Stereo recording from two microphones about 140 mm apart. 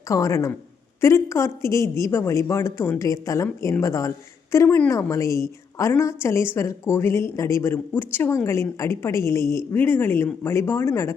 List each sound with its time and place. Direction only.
0.1 s a woman's voice: 20° left (ahead or behind)